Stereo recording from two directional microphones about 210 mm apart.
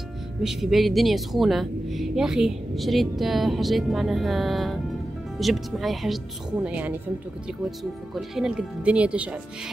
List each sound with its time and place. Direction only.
0.4 s a woman's voice: centre (ahead or behind)
8.1 s a woman's voice: centre (ahead or behind)